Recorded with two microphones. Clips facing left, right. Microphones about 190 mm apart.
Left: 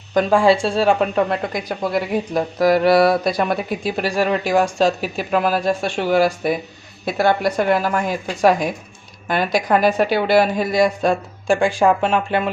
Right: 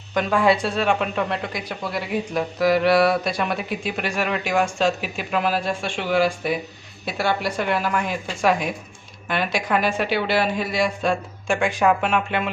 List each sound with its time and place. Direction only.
0.1 s a woman's voice: 35° left (ahead or behind)